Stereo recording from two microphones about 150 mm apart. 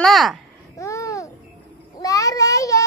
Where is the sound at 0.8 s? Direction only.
20° left (ahead or behind).